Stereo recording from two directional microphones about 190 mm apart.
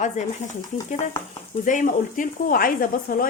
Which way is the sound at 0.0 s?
40° left (ahead or behind).